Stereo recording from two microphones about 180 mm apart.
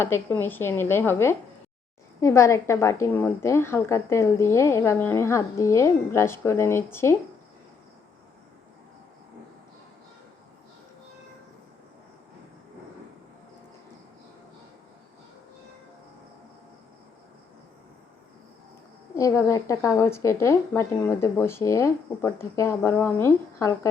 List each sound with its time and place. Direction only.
0.0 s a woman's voice: 15° left (ahead or behind)
19.1 s a woman's voice: 20° left (ahead or behind)